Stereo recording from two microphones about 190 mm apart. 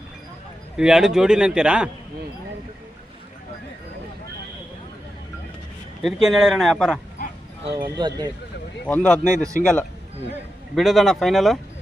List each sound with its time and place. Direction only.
0.8 s speech: 5° right (ahead or behind)
6.0 s speech: centre (ahead or behind)
7.2 s bow-wow: 45° left (ahead or behind)
7.6 s speech: 25° right (ahead or behind)
8.9 s speech: 5° left (ahead or behind)
9.5 s a man's voice: 45° left (ahead or behind)
10.8 s speech: centre (ahead or behind)